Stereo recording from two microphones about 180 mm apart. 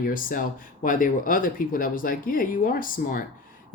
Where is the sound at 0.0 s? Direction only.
50° left (ahead or behind).